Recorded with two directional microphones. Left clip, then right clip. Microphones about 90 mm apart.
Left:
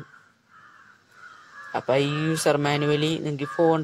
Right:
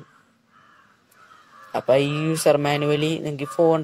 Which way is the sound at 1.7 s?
15° right (ahead or behind).